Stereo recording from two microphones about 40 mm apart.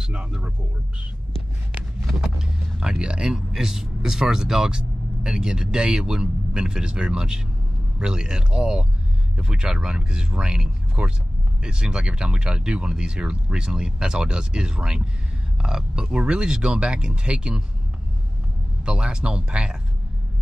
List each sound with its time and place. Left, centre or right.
0.0 s speech: centre
2.1 s speech: centre
18.9 s speech: right